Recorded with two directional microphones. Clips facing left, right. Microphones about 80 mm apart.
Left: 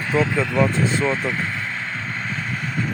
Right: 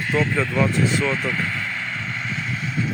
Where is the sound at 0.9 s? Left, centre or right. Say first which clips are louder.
Left 1 dB; left.